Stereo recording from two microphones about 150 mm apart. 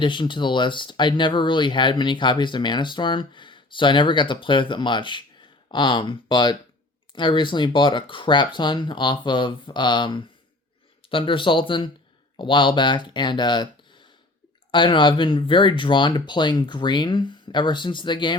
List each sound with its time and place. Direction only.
0.0 s speech: 30° left (ahead or behind)